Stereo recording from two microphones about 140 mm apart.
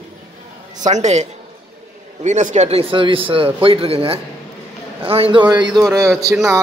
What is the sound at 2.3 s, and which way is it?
Speech, 60° right (ahead or behind).